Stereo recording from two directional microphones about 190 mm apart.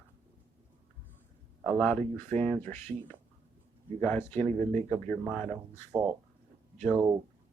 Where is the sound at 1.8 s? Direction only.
10° left (ahead or behind).